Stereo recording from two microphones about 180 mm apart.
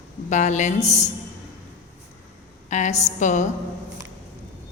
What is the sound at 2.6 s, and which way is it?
Speech, 40° left (ahead or behind).